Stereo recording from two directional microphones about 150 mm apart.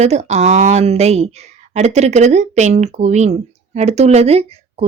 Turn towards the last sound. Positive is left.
turn(degrees=-45)  # may be behind; listen again after turning